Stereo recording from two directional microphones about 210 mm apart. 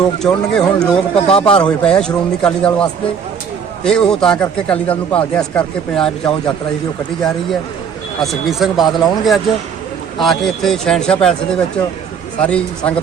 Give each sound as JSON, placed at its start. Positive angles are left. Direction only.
{"t": 0.2, "sound": "a man's voice", "side_deg": 5}
{"t": 0.9, "sound": "speech", "side_deg": 25}
{"t": 1.5, "sound": "a man's voice", "side_deg": 5}
{"t": 8.2, "sound": "a man's voice", "side_deg": 0}